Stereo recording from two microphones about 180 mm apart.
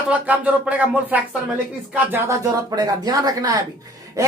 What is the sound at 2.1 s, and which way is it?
Speech, 20° right (ahead or behind).